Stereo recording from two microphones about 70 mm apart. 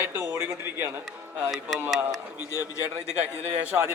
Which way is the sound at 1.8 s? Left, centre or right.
Centre.